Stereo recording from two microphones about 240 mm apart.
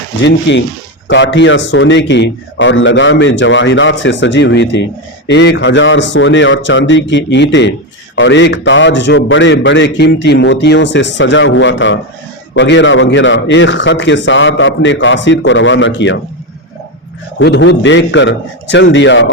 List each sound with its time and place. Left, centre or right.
0.2 s a man's voice: left
17.4 s a man's voice: left